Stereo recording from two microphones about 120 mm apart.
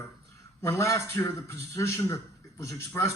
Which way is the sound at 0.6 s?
25° left (ahead or behind).